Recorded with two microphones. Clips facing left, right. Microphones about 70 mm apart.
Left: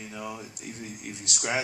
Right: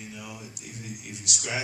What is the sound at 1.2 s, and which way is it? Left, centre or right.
Speech, left.